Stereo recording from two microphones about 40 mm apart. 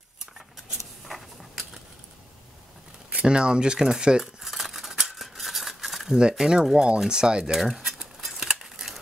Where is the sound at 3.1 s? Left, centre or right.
Right.